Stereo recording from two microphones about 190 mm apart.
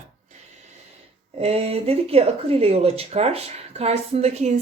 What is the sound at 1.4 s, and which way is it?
Speech, 35° right (ahead or behind).